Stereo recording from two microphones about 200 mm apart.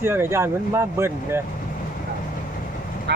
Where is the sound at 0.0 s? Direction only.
10° right (ahead or behind).